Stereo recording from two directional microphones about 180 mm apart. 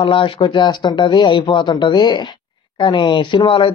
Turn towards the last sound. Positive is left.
turn(degrees=25)  # may be behind; listen again after turning